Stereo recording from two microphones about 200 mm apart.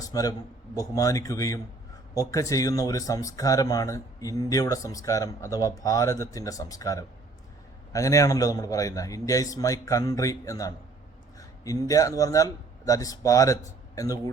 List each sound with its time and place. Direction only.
0.0 s a man's voice: 20° left (ahead or behind)